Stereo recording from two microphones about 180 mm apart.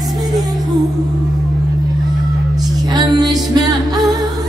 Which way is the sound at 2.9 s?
20° right (ahead or behind).